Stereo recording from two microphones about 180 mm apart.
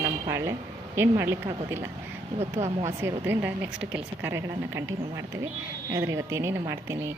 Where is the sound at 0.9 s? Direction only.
15° right (ahead or behind).